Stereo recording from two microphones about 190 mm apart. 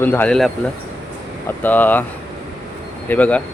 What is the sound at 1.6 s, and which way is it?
Speech, 10° left (ahead or behind).